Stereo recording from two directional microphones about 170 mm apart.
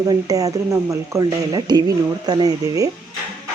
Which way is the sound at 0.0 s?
20° right (ahead or behind).